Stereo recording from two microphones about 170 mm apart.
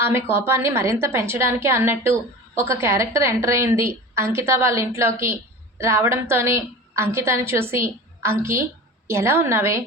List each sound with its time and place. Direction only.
0.0 s a woman's voice: 15° right (ahead or behind)